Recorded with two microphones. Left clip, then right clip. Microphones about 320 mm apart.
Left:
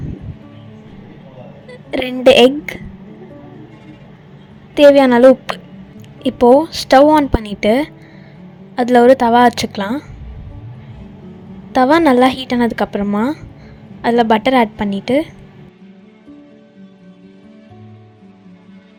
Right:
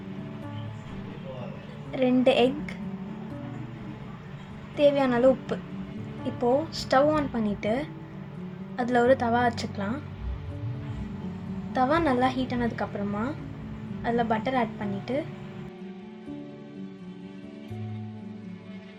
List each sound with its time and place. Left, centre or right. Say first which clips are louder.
1.9 s speech: left 12 dB; left
4.7 s speech: left 14 dB; left
11.7 s speech: left 13 dB; left